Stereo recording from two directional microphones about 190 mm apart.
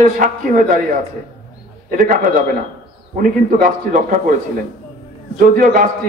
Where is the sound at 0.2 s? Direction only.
45° right (ahead or behind).